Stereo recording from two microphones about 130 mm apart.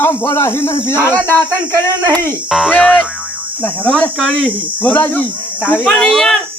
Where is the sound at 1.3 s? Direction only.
25° right (ahead or behind).